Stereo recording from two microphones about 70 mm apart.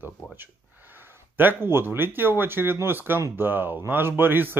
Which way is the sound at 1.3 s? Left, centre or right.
Right.